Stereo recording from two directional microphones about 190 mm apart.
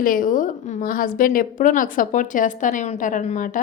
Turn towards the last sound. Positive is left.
turn(degrees=45)  # may be behind; listen again after turning